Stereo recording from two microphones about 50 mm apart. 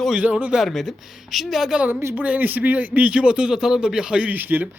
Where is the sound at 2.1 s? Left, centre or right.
Right.